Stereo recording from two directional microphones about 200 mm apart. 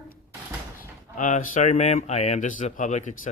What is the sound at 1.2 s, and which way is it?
Speech, 40° left (ahead or behind).